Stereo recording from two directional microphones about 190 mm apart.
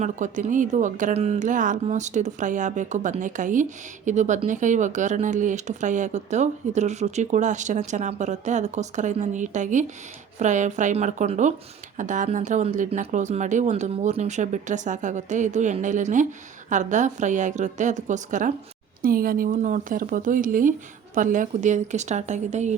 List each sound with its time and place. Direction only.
0.0 s speech: 40° right (ahead or behind)